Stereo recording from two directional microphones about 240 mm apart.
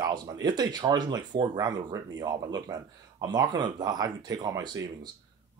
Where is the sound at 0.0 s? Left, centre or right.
Centre.